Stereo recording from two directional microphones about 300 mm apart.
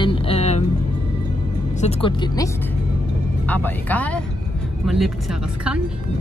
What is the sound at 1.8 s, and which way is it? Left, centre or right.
Speech, centre.